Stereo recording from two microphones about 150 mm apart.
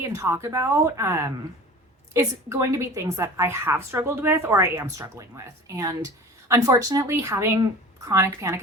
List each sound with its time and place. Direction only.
0.1 s a woman's voice: 20° right (ahead or behind)